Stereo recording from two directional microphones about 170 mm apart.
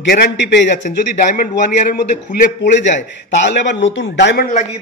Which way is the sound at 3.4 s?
90° left.